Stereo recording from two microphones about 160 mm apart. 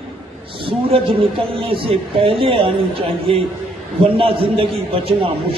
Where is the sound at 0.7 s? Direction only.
35° right (ahead or behind).